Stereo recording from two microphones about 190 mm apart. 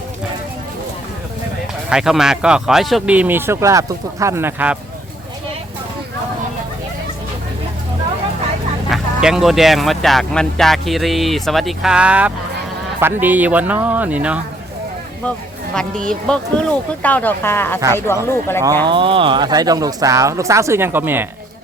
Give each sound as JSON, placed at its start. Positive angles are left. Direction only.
{"t": 1.9, "sound": "speech", "side_deg": -5}
{"t": 8.9, "sound": "speech", "side_deg": 0}
{"t": 15.7, "sound": "speech", "side_deg": 5}
{"t": 18.9, "sound": "speech", "side_deg": -25}